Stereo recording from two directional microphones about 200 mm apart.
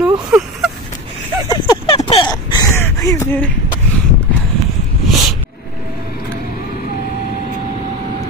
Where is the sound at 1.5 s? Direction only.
20° left (ahead or behind).